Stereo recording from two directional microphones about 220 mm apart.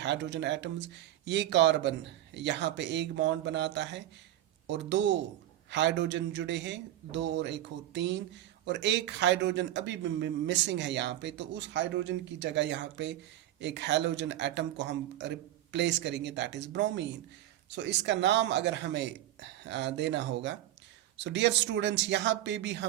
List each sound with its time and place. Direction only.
0.0 s a man's voice: 55° right (ahead or behind)